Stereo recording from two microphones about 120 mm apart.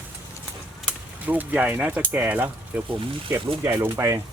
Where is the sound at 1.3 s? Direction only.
15° right (ahead or behind).